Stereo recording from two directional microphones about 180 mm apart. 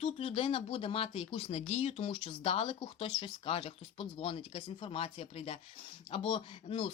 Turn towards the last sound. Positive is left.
turn(degrees=30)  # may be behind; listen again after turning